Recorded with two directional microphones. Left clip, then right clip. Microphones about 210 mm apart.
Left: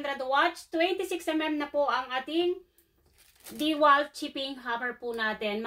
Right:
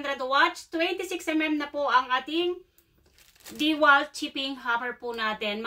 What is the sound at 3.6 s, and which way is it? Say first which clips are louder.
A woman's voice: right 2 dB; 15° right (ahead or behind).